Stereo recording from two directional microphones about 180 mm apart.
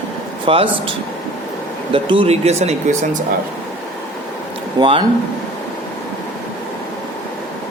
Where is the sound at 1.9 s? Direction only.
30° right (ahead or behind).